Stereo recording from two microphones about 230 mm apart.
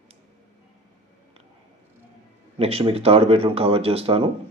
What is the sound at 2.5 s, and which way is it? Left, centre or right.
Speech, right.